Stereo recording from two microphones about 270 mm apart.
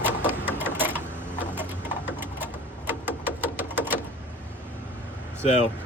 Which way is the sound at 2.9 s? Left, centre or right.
Centre.